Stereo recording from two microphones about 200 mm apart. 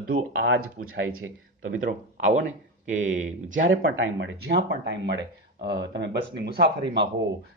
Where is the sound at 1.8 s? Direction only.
40° right (ahead or behind).